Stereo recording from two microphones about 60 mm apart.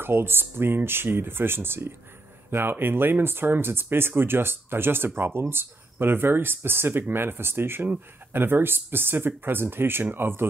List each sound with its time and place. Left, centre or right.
0.0 s speech: right